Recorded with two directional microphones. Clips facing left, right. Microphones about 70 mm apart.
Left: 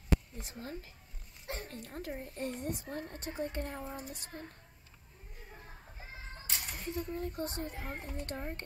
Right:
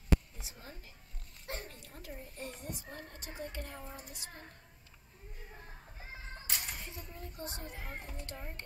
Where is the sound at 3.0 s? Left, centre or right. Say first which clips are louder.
Left 5 dB; left.